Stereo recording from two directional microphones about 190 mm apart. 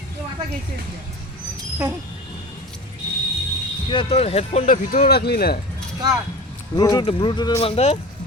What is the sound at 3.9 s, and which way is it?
Speech, 30° left (ahead or behind).